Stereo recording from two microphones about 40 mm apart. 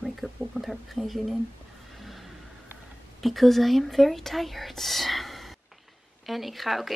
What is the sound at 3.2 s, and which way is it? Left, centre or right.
Speech, centre.